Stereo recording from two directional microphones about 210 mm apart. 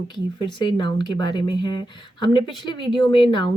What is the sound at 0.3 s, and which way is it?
A woman's voice, 20° left (ahead or behind).